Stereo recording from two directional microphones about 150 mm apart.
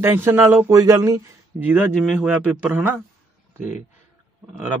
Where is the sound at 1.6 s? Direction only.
10° right (ahead or behind).